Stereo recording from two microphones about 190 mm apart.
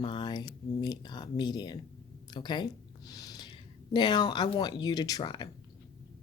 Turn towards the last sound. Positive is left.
turn(degrees=20)  # may be behind; listen again after turning